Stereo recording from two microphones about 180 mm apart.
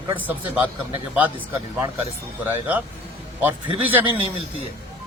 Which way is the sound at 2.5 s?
10° right (ahead or behind).